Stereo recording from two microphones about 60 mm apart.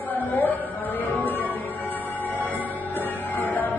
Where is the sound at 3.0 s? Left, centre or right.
Left.